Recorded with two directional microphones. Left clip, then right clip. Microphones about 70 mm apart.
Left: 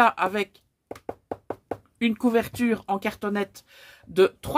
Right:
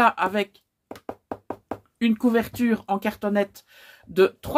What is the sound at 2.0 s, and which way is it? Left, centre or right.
Speech, left.